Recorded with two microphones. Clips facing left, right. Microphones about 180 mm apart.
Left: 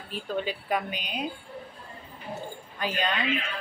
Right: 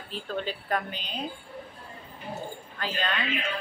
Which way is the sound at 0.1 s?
10° left (ahead or behind).